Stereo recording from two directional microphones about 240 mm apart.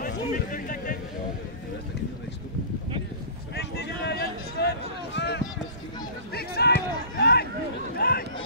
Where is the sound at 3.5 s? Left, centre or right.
Left.